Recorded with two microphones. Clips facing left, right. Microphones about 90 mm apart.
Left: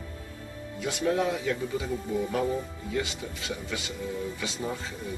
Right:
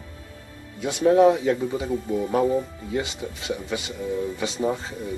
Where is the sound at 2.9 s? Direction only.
20° right (ahead or behind).